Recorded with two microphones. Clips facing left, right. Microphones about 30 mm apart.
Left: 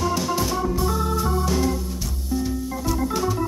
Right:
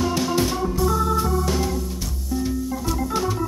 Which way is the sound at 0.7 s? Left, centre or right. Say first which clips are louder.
Right 3 dB; centre.